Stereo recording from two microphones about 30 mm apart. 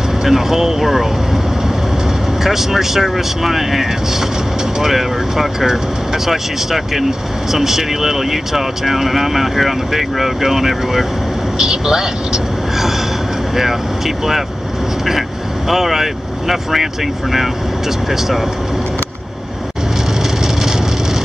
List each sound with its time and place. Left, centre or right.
0.2 s speech: centre
2.4 s speech: centre
11.5 s speech: right
13.6 s speech: centre
15.7 s speech: centre